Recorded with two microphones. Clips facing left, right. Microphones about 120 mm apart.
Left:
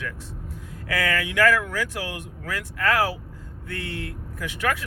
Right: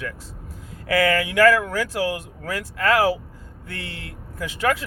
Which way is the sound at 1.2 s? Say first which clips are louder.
Right 2 dB; 35° right (ahead or behind).